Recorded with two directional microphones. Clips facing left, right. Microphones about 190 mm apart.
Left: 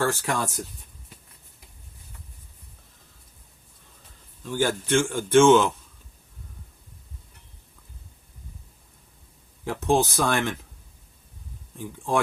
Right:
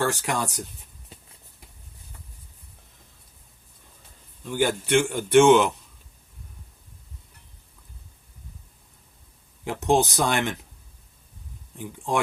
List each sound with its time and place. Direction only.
0.0 s speech: 20° right (ahead or behind)
4.4 s a man's voice: 15° right (ahead or behind)
9.6 s speech: 20° right (ahead or behind)